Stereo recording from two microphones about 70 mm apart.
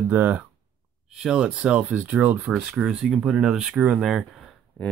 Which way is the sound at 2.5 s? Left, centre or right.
Centre.